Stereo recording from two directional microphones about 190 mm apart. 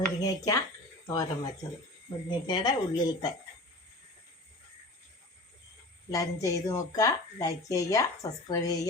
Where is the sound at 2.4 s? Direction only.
20° left (ahead or behind).